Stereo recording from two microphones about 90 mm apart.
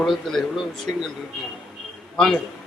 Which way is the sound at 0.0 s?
5° left (ahead or behind).